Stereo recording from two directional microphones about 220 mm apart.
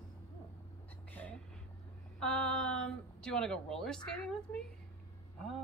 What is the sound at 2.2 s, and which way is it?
Speech, 5° left (ahead or behind).